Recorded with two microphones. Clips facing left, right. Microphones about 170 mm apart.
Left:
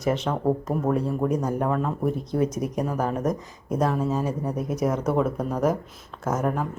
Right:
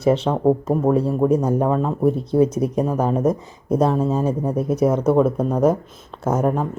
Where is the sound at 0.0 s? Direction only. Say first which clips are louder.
Right 7 dB; 30° right (ahead or behind).